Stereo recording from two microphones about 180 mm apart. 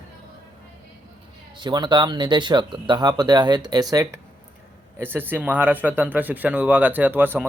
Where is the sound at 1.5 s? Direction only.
25° right (ahead or behind).